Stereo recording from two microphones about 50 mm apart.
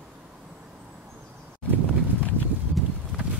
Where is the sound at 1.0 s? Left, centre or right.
Right.